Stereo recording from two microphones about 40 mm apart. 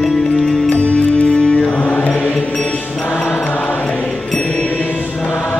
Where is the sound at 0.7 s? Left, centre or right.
Left.